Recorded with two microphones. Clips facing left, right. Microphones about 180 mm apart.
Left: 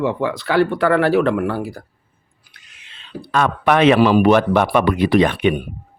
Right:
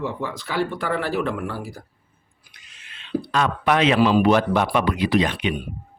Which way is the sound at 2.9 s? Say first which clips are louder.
Right 7 dB; 35° left (ahead or behind).